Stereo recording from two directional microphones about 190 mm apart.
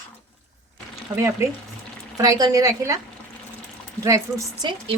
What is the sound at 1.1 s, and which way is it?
A woman's voice, 15° right (ahead or behind).